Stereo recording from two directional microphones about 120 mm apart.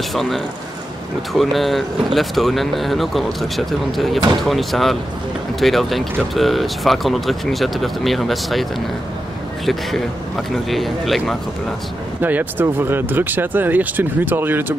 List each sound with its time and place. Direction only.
0.1 s speech: centre (ahead or behind)
1.4 s speech: centre (ahead or behind)
9.7 s speech: centre (ahead or behind)
12.2 s speech: 15° right (ahead or behind)